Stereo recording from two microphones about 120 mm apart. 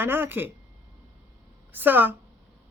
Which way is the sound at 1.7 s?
15° right (ahead or behind).